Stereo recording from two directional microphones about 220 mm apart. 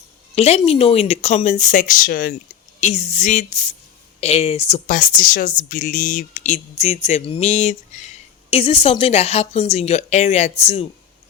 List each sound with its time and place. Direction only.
0.3 s speech: 25° left (ahead or behind)
2.8 s a woman's voice: 30° left (ahead or behind)